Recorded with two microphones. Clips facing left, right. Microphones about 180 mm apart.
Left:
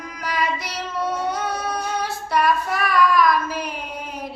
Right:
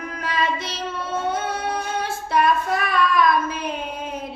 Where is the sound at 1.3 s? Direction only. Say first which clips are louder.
Even; 25° right (ahead or behind).